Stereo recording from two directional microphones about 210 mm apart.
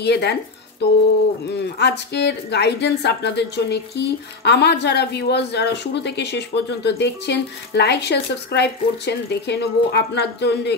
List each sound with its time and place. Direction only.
0.0 s speech: 50° left (ahead or behind)